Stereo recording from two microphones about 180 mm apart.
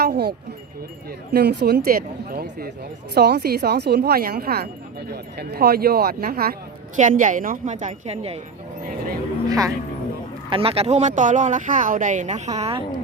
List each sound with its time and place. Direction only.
0.0 s speech: 65° right (ahead or behind); by 8.4 s 35° right (ahead or behind)
8.8 s speech: 55° right (ahead or behind)
9.5 s speech: 20° right (ahead or behind)
10.5 s speech: 30° right (ahead or behind)